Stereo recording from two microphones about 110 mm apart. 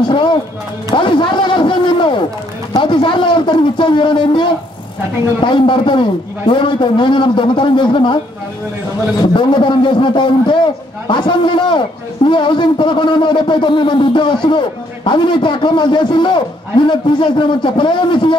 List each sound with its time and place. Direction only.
0.1 s a sound: 45° left (ahead or behind)
0.9 s speech: 50° left (ahead or behind)
9.2 s speech: 45° left (ahead or behind)